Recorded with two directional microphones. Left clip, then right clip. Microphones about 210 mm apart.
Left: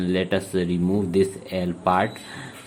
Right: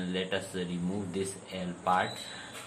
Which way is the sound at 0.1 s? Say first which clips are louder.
Left 10 dB; 50° left (ahead or behind).